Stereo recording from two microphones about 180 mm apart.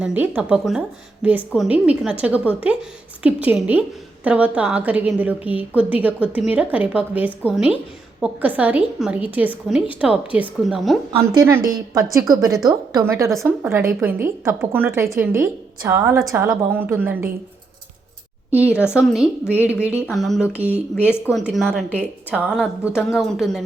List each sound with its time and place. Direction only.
0.0 s a woman's voice: 10° right (ahead or behind)
11.3 s a woman's voice: 15° right (ahead or behind)
13.3 s a woman's voice: centre (ahead or behind)
13.7 s a woman's voice: 10° right (ahead or behind)
18.9 s a woman's voice: 5° right (ahead or behind)